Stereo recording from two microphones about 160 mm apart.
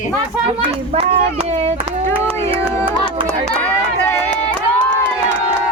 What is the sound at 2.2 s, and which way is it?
Music, 35° right (ahead or behind).